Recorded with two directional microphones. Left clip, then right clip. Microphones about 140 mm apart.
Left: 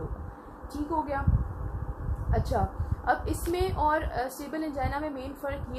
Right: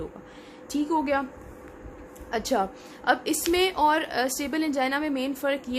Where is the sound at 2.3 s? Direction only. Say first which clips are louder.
Right 4 dB; 55° right (ahead or behind).